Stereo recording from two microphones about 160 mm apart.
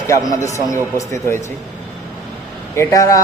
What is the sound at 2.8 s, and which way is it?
Speech, 20° left (ahead or behind).